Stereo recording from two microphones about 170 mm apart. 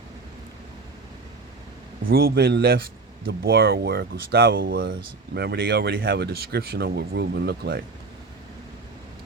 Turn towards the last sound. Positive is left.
turn(degrees=-70)  # may be behind; listen again after turning